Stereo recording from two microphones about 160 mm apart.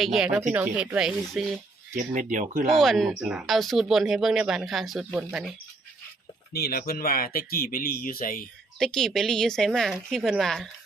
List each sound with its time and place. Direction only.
0.0 s speech: centre (ahead or behind)
2.0 s speech: 55° right (ahead or behind)
2.8 s speech: centre (ahead or behind)
6.5 s speech: 75° left (ahead or behind)
8.8 s speech: 5° left (ahead or behind)